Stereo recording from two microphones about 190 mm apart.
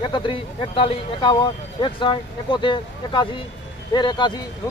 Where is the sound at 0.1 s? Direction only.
25° left (ahead or behind).